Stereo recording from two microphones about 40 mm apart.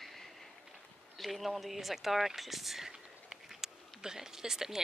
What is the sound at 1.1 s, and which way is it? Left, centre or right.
Speech, centre.